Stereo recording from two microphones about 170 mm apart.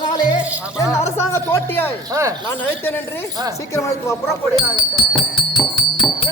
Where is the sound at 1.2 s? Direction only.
15° left (ahead or behind).